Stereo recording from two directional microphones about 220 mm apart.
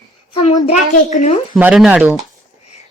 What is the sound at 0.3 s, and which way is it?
Speech, 30° left (ahead or behind).